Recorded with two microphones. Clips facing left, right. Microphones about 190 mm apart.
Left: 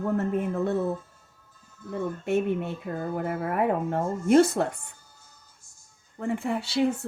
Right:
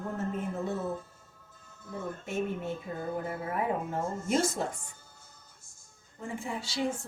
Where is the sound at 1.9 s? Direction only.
65° left (ahead or behind).